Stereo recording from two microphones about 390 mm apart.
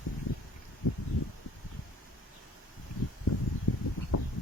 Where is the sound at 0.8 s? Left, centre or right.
Left.